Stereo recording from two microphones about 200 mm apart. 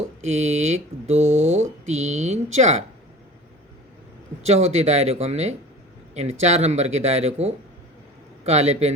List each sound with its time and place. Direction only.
0.2 s speech: 35° right (ahead or behind)
4.4 s speech: 30° right (ahead or behind)